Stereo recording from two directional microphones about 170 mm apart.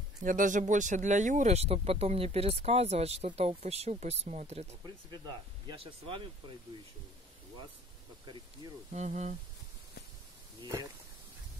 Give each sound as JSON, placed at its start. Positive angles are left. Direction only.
{"t": 0.2, "sound": "speech", "side_deg": -50}
{"t": 5.2, "sound": "speech", "side_deg": -25}
{"t": 8.9, "sound": "speech", "side_deg": -45}
{"t": 10.6, "sound": "speech", "side_deg": -20}